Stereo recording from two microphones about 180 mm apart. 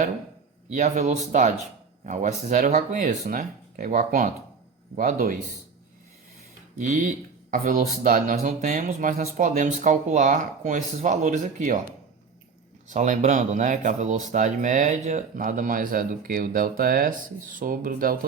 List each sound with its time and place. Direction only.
0.7 s speech: 40° right (ahead or behind)
6.7 s speech: 45° right (ahead or behind)
12.9 s speech: 45° right (ahead or behind)